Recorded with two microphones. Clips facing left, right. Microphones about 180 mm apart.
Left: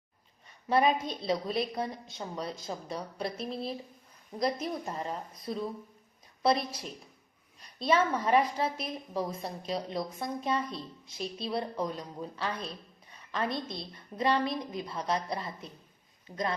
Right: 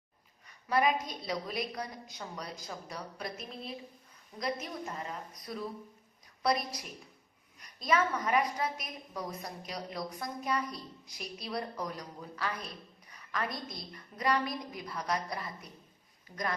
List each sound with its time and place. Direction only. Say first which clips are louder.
0.7 s a woman's voice: left 3 dB; 25° left (ahead or behind)